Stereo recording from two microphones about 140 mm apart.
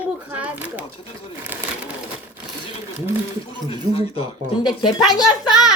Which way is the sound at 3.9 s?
40° left (ahead or behind).